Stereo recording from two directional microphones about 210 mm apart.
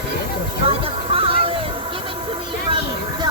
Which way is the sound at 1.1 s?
25° right (ahead or behind).